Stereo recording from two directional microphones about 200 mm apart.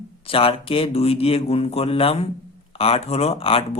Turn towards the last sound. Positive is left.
turn(degrees=30)  # may be behind; listen again after turning